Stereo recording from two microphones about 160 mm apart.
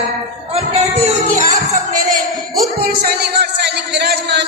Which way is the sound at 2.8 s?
75° right (ahead or behind).